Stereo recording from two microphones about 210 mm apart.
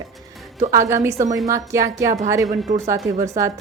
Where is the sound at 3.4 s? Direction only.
15° right (ahead or behind).